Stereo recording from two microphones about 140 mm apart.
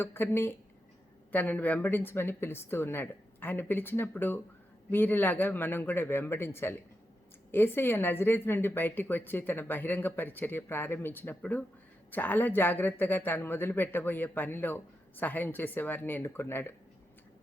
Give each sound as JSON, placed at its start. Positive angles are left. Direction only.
{"t": 0.0, "sound": "a woman's voice", "side_deg": 15}